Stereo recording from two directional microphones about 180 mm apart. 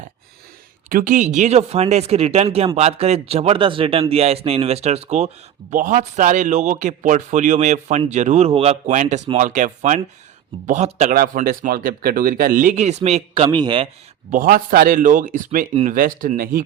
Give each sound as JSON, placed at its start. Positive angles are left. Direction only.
{"t": 0.9, "sound": "a man's voice", "side_deg": -50}
{"t": 11.1, "sound": "speech", "side_deg": -55}
{"t": 14.3, "sound": "speech", "side_deg": -50}
{"t": 15.7, "sound": "a man's voice", "side_deg": -35}
{"t": 16.0, "sound": "speech", "side_deg": -50}